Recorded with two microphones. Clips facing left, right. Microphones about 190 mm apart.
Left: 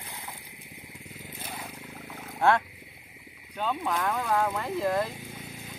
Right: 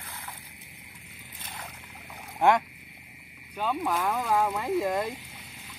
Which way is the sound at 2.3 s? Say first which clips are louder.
Right 1 dB; 15° right (ahead or behind).